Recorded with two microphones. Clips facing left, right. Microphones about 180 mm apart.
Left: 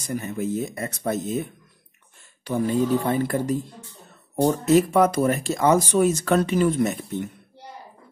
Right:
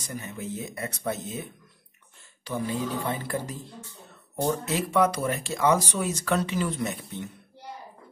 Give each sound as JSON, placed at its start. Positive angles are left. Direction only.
{"t": 0.0, "sound": "speech", "side_deg": 45}
{"t": 2.4, "sound": "speech", "side_deg": 50}
{"t": 4.4, "sound": "speech", "side_deg": 45}